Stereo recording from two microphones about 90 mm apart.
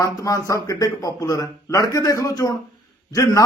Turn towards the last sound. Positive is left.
turn(degrees=45)  # may be behind; listen again after turning